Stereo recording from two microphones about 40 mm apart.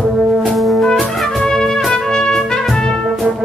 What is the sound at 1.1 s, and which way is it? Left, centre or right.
Trumpet, centre.